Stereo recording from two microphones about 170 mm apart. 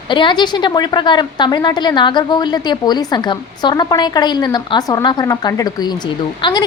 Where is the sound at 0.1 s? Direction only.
30° left (ahead or behind).